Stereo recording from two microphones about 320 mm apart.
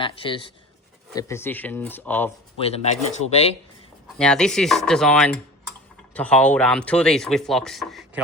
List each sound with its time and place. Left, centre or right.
0.0 s speech: centre
2.6 s speech: centre
4.2 s speech: centre